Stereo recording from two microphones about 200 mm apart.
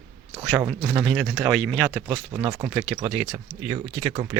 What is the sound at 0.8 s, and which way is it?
Speech, centre (ahead or behind).